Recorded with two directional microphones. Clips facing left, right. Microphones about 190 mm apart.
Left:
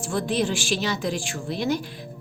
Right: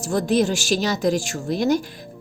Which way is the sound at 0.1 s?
40° right (ahead or behind).